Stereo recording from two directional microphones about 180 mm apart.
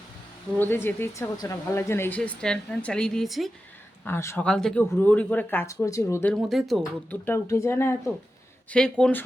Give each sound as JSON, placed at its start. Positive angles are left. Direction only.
{"t": 0.6, "sound": "speech", "side_deg": 10}
{"t": 4.0, "sound": "speech", "side_deg": 15}
{"t": 6.3, "sound": "speech", "side_deg": 0}
{"t": 7.3, "sound": "speech", "side_deg": 15}